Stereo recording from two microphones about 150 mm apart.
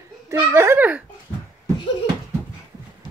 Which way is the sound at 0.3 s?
15° right (ahead or behind).